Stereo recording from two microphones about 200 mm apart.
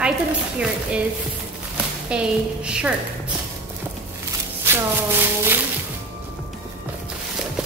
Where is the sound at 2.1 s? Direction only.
5° right (ahead or behind).